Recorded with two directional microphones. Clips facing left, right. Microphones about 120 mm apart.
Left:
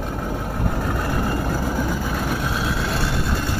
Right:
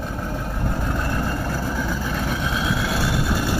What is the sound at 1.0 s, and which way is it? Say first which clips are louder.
Vehicle: left 2 dB; 5° left (ahead or behind).